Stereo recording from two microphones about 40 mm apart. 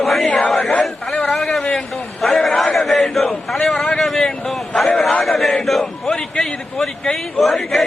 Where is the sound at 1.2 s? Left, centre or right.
Centre.